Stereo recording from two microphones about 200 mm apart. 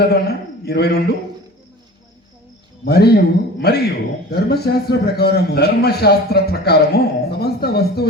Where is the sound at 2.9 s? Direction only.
55° left (ahead or behind).